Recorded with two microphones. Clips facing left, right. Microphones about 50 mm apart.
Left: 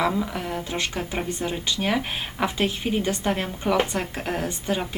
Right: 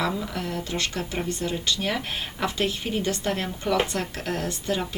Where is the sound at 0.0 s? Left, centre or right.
Centre.